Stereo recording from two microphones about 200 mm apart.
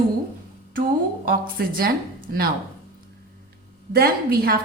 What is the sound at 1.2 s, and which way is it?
Speech, 45° right (ahead or behind).